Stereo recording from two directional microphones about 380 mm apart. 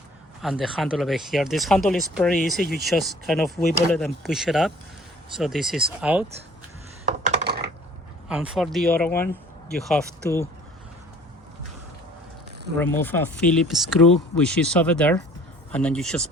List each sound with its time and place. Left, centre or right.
0.4 s speech: centre
7.3 s typing: centre
8.3 s speech: centre
12.8 s speech: centre